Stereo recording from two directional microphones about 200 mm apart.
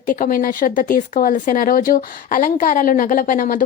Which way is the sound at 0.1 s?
45° left (ahead or behind).